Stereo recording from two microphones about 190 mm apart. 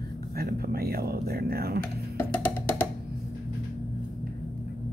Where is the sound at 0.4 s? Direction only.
55° right (ahead or behind).